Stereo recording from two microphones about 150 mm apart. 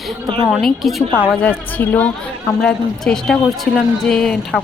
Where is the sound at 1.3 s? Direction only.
10° left (ahead or behind).